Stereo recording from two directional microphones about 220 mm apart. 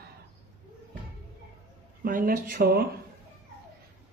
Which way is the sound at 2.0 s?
40° right (ahead or behind).